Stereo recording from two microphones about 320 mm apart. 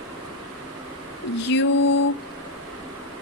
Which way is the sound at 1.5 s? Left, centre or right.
Left.